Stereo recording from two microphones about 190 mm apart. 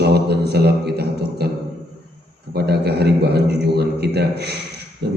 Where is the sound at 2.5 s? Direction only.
60° right (ahead or behind).